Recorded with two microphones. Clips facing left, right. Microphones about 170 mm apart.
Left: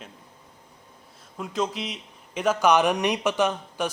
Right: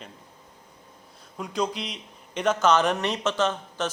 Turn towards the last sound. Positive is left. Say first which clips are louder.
# left 1 dB
turn(degrees=15)  # may be behind; listen again after turning